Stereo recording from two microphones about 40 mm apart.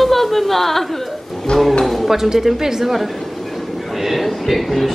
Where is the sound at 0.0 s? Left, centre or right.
Centre.